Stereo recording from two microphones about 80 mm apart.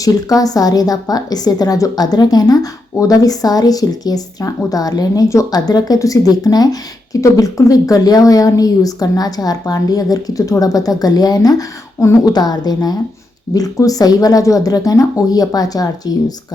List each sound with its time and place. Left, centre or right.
0.0 s speech: left
12.3 s a woman's voice: left